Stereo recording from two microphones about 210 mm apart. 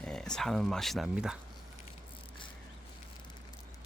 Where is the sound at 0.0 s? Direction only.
5° left (ahead or behind).